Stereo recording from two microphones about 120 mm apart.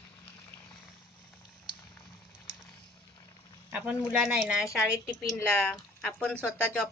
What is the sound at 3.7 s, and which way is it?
A woman's voice, 10° right (ahead or behind).